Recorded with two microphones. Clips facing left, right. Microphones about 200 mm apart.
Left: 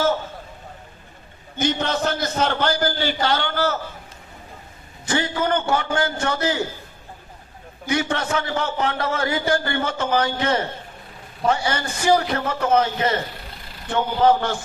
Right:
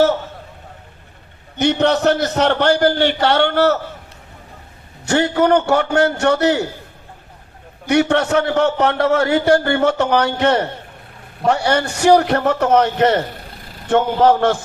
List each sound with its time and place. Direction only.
1.5 s a man's voice: 70° right (ahead or behind)
5.0 s a man's voice: 70° right (ahead or behind)
7.9 s a man's voice: 70° right (ahead or behind)